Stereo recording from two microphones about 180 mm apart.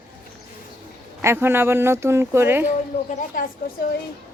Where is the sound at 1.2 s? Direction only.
15° right (ahead or behind).